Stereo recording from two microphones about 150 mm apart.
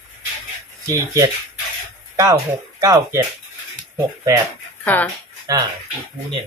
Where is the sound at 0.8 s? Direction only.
20° right (ahead or behind).